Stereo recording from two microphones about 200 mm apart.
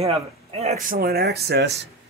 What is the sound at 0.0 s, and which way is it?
Speech, 30° right (ahead or behind).